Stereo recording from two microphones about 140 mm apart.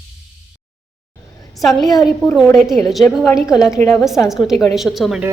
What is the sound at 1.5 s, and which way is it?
A woman's voice, centre (ahead or behind).